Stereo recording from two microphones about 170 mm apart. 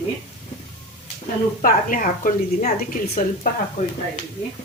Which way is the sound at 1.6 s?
55° left (ahead or behind).